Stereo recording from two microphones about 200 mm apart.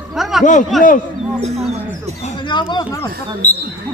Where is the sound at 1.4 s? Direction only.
30° right (ahead or behind).